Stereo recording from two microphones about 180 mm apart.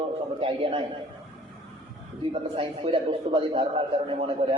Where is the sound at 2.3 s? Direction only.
30° right (ahead or behind).